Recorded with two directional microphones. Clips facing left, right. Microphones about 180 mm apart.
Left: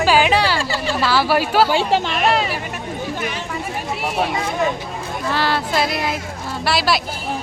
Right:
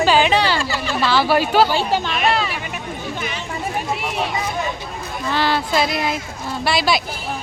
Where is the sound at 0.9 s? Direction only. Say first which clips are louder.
Right 1 dB; 5° left (ahead or behind).